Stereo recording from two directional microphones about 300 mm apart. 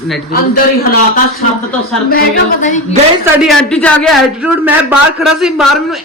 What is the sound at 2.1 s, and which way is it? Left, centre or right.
Speech, left.